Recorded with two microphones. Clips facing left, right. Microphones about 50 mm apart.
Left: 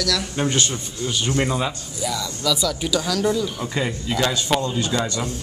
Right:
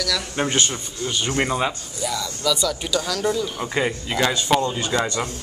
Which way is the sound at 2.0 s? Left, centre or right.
Centre.